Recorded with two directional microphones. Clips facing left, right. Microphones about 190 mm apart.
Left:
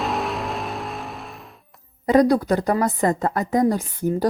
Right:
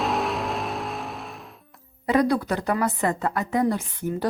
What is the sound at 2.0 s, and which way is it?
A woman's voice, 35° left (ahead or behind).